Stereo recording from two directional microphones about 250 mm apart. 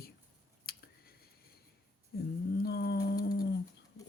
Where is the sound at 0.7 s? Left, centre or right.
Left.